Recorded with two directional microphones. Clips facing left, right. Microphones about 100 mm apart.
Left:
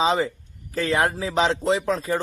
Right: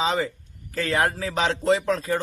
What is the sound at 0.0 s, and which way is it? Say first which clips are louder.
A man's voice: left 3 dB; 20° left (ahead or behind).